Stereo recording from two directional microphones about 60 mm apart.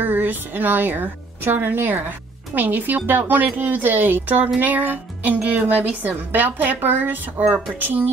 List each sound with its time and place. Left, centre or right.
0.0 s a woman's voice: right